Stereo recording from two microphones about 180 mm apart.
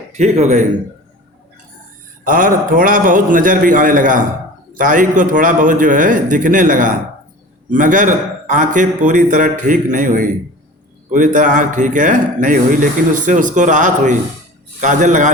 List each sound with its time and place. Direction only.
0.1 s a man's voice: 40° right (ahead or behind)
2.2 s speech: 50° right (ahead or behind)